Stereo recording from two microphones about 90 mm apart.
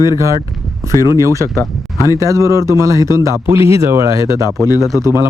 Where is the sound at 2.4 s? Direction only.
35° right (ahead or behind).